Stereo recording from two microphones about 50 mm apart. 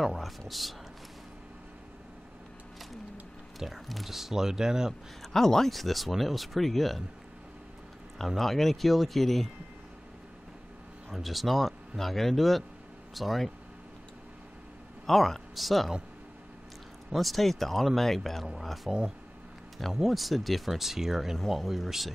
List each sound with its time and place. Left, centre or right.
0.0 s speech: centre
3.5 s speech: centre
5.2 s speech: centre
8.4 s speech: centre
11.1 s speech: centre
15.0 s speech: centre
17.1 s speech: centre